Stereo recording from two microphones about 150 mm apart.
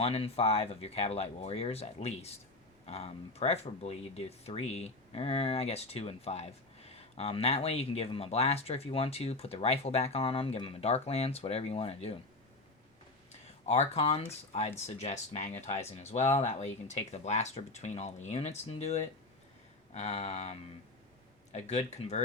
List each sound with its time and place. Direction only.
0.0 s speech: 40° left (ahead or behind)
13.7 s speech: 45° left (ahead or behind)